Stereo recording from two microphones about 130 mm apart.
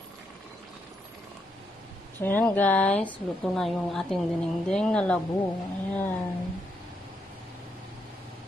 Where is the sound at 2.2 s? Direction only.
15° left (ahead or behind).